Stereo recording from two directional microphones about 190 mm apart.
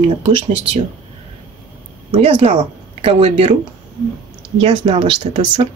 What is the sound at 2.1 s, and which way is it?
Speech, 30° right (ahead or behind).